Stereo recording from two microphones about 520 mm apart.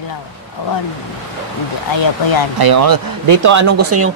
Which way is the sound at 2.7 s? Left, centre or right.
Right.